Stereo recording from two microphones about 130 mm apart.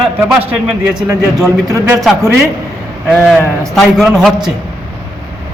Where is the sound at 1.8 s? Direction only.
5° right (ahead or behind).